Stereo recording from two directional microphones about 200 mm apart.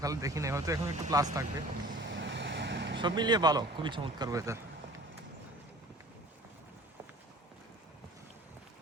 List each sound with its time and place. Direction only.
0.0 s speech: 15° right (ahead or behind)
2.0 s vehicle: 65° right (ahead or behind)
3.0 s speech: 20° right (ahead or behind)